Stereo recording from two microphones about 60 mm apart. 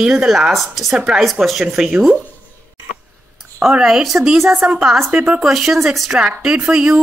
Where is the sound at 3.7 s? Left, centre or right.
Centre.